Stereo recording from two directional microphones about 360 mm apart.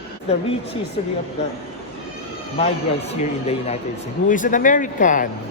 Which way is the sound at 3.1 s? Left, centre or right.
Centre.